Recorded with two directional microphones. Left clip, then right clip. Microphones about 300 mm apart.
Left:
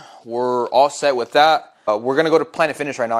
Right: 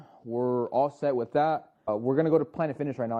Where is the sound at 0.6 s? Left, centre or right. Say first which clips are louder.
Left 14 dB; centre.